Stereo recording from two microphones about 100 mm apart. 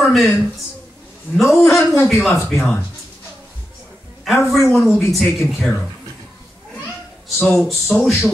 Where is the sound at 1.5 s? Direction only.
25° left (ahead or behind).